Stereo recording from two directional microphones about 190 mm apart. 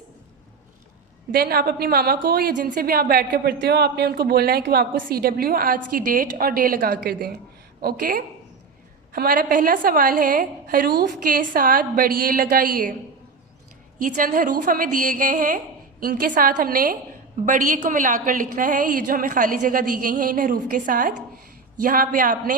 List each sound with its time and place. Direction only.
1.3 s a woman's voice: 55° right (ahead or behind)
14.0 s a woman's voice: 45° right (ahead or behind)